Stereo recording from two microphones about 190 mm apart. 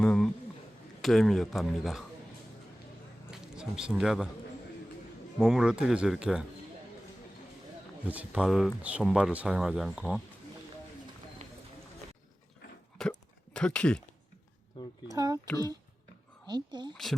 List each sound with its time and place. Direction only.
0.0 s a sound: 5° left (ahead or behind)
1.0 s speech: centre (ahead or behind)
3.4 s speech: 5° right (ahead or behind)
5.4 s speech: centre (ahead or behind)
8.0 s speech: 5° right (ahead or behind)
11.4 s clip-clop: 40° right (ahead or behind)
13.0 s hiccup: 5° left (ahead or behind)
15.1 s a sound: 20° right (ahead or behind)
16.5 s speech: 20° right (ahead or behind)
16.9 s speech: centre (ahead or behind)